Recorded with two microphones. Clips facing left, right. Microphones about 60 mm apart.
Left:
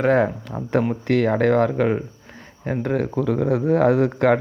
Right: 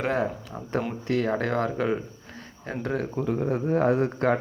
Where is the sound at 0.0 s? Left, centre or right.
Left.